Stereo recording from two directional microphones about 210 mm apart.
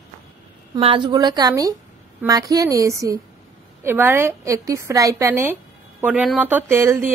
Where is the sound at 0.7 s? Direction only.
25° right (ahead or behind).